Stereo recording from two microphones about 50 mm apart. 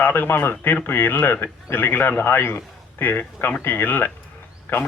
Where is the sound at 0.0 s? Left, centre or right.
Left.